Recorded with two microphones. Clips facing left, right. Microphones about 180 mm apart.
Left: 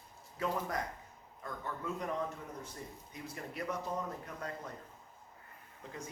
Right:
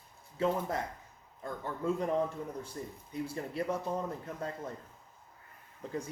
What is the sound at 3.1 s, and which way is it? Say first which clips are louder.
Speech: right 10 dB; 30° right (ahead or behind).